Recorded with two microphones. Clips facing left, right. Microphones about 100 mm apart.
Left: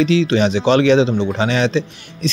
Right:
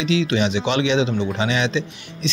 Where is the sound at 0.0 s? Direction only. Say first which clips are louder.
Left 5 dB; 35° left (ahead or behind).